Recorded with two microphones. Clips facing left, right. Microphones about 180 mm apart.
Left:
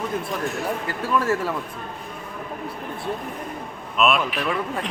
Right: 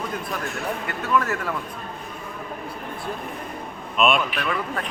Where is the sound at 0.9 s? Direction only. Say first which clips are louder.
Left 1 dB; 30° left (ahead or behind).